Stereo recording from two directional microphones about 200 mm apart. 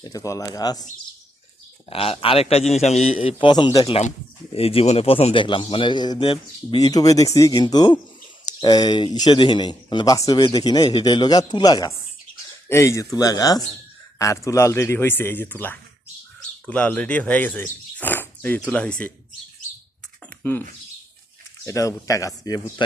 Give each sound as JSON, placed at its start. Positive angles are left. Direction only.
{"t": 0.0, "sound": "speech", "side_deg": 15}
{"t": 1.9, "sound": "a man's voice", "side_deg": 25}
{"t": 20.4, "sound": "speech", "side_deg": 10}
{"t": 21.7, "sound": "speech", "side_deg": 15}